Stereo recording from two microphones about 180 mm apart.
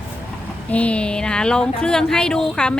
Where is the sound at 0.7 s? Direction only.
5° left (ahead or behind).